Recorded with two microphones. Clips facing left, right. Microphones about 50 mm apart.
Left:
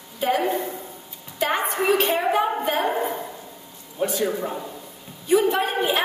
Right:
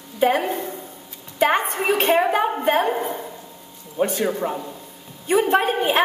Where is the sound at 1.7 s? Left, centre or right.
Right.